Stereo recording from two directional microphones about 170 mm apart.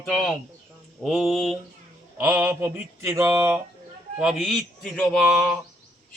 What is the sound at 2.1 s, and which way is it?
Speech, 10° right (ahead or behind).